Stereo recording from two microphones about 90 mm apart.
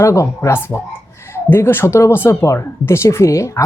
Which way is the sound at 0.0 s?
35° left (ahead or behind).